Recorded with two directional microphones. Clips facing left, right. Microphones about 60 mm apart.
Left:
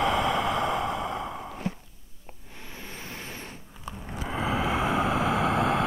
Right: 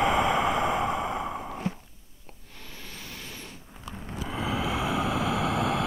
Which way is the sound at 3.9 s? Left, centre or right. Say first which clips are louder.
Left 2 dB; left.